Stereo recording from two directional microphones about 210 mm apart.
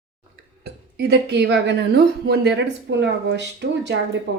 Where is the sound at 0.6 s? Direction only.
55° right (ahead or behind).